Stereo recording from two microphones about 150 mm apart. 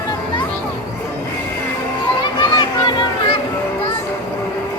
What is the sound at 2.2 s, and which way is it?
Children playing, 30° left (ahead or behind).